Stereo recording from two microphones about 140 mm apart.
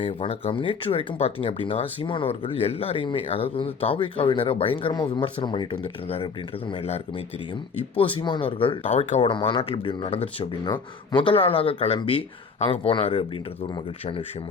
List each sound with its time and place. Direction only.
0.4 s speech: 40° left (ahead or behind)
8.9 s speech: 50° left (ahead or behind)
9.2 s speech: 40° left (ahead or behind)